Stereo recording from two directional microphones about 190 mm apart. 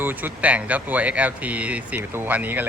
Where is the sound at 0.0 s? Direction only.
10° right (ahead or behind).